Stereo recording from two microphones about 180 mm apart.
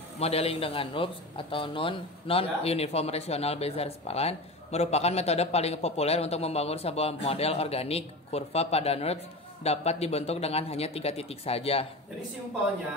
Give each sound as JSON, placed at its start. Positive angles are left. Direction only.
{"t": 0.2, "sound": "a man's voice", "side_deg": 35}